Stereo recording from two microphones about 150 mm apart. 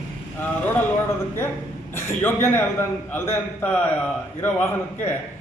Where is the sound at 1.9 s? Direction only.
15° left (ahead or behind).